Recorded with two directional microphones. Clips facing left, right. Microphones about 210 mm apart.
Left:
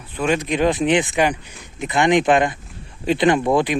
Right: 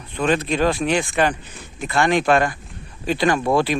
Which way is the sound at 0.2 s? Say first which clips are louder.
Even; 15° left (ahead or behind).